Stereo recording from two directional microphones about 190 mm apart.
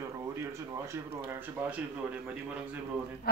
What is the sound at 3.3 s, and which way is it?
Speech, 55° left (ahead or behind).